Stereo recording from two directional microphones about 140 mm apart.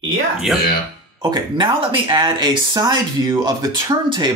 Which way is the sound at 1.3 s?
35° right (ahead or behind).